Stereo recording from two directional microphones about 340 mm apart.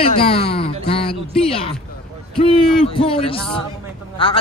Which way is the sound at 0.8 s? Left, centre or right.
Centre.